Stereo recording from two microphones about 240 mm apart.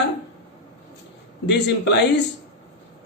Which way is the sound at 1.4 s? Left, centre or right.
Left.